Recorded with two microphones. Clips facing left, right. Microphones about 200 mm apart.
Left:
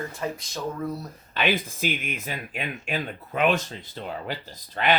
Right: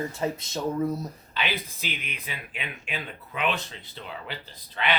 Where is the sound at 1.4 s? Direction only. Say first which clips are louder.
Left 7 dB; 50° left (ahead or behind).